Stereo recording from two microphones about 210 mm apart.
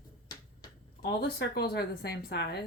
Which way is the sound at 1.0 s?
50° left (ahead or behind).